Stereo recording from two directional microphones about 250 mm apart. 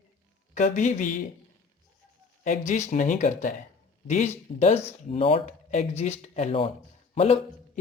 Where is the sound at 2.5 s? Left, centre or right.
Left.